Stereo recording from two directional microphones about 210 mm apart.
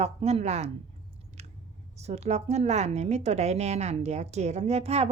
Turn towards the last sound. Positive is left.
turn(degrees=-30)  # may be behind; listen again after turning